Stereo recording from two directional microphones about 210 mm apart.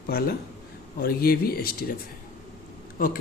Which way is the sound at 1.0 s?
45° left (ahead or behind).